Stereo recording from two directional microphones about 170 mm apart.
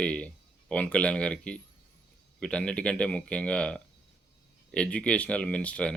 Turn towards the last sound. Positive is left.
turn(degrees=5)  # may be behind; listen again after turning